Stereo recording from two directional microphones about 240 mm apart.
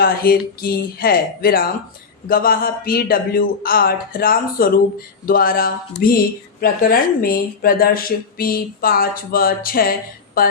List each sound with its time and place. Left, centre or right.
0.0 s speech: left